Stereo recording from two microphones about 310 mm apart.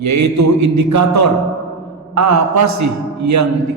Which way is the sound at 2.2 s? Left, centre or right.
Right.